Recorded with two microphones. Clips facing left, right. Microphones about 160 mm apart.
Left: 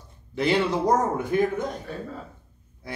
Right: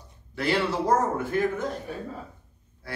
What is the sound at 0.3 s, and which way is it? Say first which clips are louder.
A man's voice: left 3 dB; 20° left (ahead or behind).